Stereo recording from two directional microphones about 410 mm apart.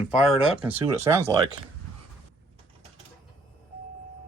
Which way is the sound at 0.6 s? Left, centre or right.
Centre.